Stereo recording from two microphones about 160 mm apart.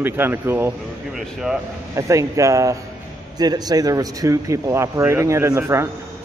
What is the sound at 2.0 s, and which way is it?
Speech, 20° right (ahead or behind).